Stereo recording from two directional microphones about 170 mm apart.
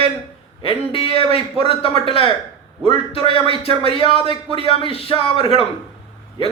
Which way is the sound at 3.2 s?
30° left (ahead or behind).